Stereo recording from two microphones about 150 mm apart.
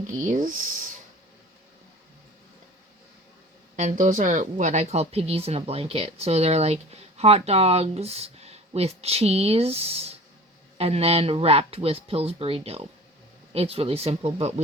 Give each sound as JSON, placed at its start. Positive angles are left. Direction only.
{"t": 0.3, "sound": "speech", "side_deg": -60}
{"t": 3.8, "sound": "speech", "side_deg": -55}